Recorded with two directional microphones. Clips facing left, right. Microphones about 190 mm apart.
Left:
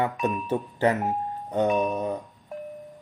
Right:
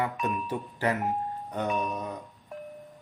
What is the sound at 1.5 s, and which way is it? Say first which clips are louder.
Music: left 8 dB; 25° left (ahead or behind).